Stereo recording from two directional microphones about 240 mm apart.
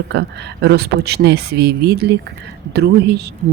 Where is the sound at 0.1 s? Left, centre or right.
Right.